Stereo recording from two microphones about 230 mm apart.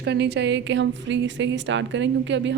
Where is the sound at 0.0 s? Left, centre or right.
Right.